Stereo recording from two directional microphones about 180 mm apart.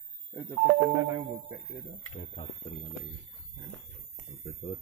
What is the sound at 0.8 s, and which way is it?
Speech, 15° right (ahead or behind).